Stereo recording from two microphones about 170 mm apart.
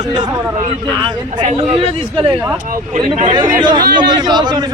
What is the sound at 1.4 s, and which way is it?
Speech, 45° right (ahead or behind).